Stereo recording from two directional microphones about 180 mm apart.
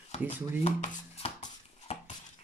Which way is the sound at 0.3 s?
35° left (ahead or behind).